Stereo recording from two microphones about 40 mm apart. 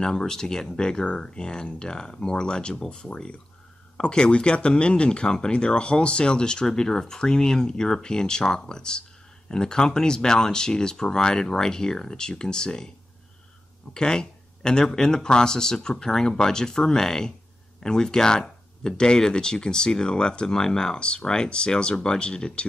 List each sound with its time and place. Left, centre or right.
0.0 s speech: centre
13.9 s speech: centre